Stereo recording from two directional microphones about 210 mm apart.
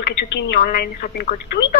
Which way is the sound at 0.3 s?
55° left (ahead or behind).